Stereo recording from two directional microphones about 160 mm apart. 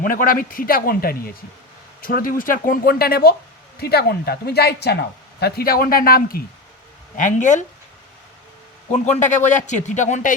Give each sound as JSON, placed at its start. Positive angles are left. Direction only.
{"t": 0.0, "sound": "a woman's voice", "side_deg": 60}
{"t": 7.2, "sound": "a man's voice", "side_deg": 50}
{"t": 8.9, "sound": "a man's voice", "side_deg": 50}